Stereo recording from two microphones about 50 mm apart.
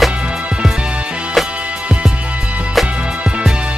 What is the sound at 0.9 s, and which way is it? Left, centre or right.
Music, right.